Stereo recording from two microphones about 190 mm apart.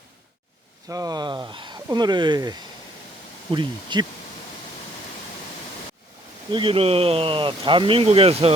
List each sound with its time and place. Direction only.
0.9 s speech: 20° right (ahead or behind)
6.5 s speech: 25° right (ahead or behind)